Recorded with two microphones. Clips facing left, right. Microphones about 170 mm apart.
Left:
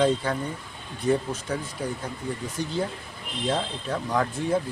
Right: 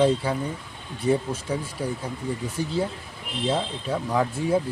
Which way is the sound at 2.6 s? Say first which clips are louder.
Right 2 dB; 5° right (ahead or behind).